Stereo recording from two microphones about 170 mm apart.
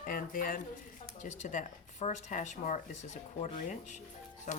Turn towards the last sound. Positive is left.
turn(degrees=45)  # may be behind; listen again after turning